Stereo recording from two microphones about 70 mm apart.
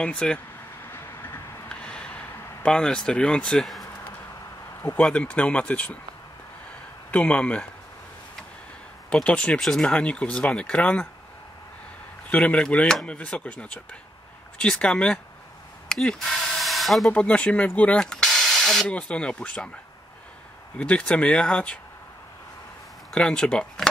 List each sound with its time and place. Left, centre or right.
0.0 s speech: centre
0.8 s train: left
1.7 s a sound: centre
4.9 s speech: centre
7.1 s speech: centre
9.1 s speech: centre
12.3 s speech: centre
15.9 s a sound: centre
17.1 s speech: centre
18.9 s speech: centre
20.7 s speech: centre
23.1 s speech: centre